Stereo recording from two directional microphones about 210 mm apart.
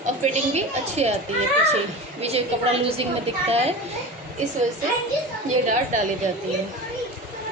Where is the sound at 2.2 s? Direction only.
30° right (ahead or behind).